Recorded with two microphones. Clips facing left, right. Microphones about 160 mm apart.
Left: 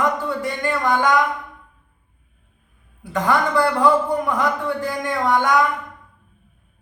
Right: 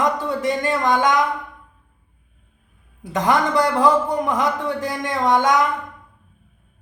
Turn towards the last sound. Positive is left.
turn(degrees=-20)  # may be behind; listen again after turning